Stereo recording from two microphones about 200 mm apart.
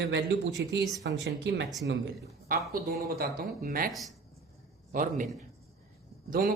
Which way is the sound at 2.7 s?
50° right (ahead or behind).